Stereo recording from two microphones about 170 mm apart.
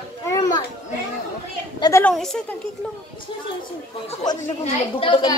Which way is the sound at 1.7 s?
25° left (ahead or behind).